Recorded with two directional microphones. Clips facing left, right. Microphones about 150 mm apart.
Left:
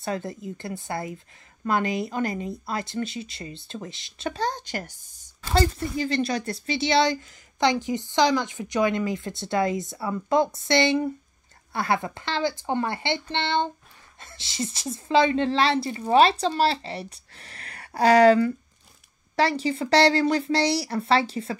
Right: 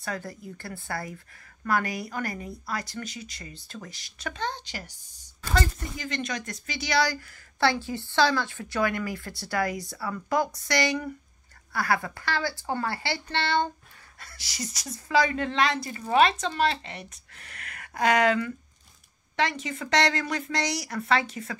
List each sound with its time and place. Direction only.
0.0 s speech: 25° left (ahead or behind); by 4.9 s 50° left (ahead or behind)
5.5 s a woman's voice: 30° left (ahead or behind)